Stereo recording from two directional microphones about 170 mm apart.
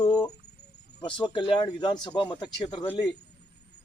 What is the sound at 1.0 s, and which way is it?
A man's voice, 30° left (ahead or behind).